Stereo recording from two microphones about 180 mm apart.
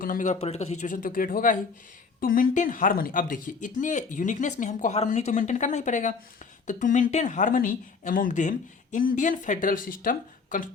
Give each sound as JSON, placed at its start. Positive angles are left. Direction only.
{"t": 0.0, "sound": "speech", "side_deg": 50}